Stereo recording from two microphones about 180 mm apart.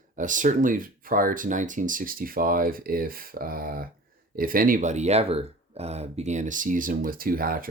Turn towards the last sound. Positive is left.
turn(degrees=-55)  # may be behind; listen again after turning